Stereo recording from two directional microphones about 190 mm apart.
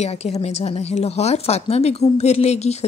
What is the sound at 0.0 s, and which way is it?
Speech, 35° left (ahead or behind).